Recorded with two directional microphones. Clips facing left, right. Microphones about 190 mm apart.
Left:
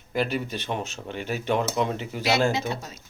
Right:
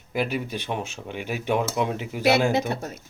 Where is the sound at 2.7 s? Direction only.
60° right (ahead or behind).